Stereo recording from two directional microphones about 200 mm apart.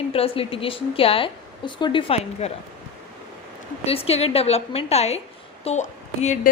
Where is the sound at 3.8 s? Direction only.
30° left (ahead or behind).